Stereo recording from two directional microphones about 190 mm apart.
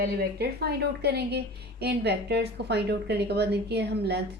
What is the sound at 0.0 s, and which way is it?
A woman's voice, 55° right (ahead or behind).